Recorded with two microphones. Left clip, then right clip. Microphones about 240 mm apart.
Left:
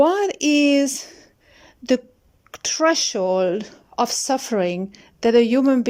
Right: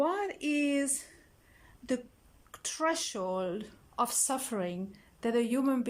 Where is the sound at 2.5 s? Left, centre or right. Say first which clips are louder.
Left 13 dB; left.